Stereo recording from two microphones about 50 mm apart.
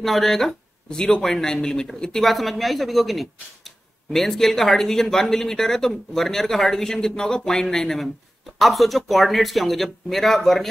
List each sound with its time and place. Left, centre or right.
0.0 s speech: centre